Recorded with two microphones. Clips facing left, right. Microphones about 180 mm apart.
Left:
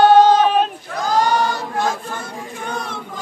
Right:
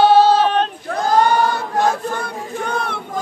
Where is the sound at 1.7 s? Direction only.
35° right (ahead or behind).